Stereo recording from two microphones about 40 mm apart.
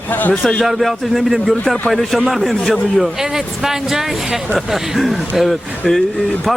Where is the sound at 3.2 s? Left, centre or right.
Centre.